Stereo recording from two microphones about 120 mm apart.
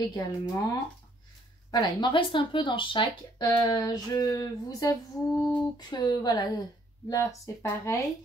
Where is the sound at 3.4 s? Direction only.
30° left (ahead or behind).